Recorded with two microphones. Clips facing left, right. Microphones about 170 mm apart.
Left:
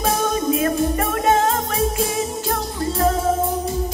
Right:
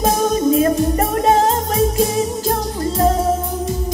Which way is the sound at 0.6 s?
35° right (ahead or behind).